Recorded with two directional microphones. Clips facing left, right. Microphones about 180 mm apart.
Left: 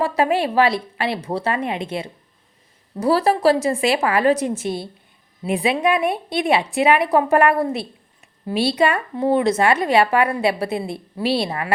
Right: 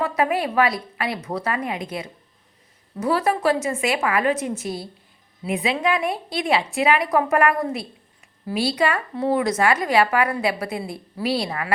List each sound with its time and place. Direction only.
0.0 s a woman's voice: 30° left (ahead or behind)